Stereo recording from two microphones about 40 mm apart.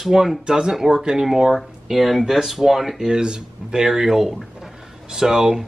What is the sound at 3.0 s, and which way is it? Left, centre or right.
Speech, centre.